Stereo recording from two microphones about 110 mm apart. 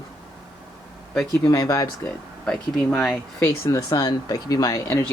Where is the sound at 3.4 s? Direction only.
25° left (ahead or behind).